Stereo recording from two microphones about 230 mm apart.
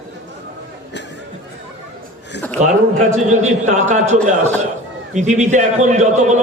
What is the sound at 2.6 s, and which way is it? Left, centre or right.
A man's voice, right.